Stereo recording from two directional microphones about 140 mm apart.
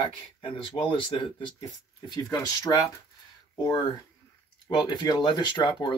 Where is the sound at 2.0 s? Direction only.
25° left (ahead or behind).